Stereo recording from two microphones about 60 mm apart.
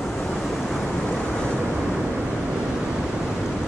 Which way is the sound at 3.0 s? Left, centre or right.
Centre.